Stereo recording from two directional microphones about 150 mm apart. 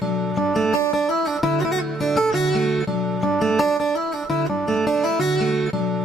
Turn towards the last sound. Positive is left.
turn(degrees=0)  # may be behind; listen again after turning